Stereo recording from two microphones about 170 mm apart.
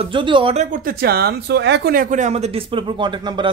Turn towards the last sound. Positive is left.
turn(degrees=-25)  # may be behind; listen again after turning